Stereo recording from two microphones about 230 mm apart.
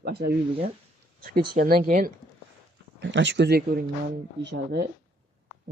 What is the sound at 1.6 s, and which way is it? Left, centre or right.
Speech, right.